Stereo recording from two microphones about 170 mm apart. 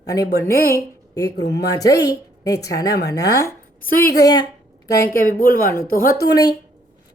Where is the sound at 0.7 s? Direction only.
20° left (ahead or behind).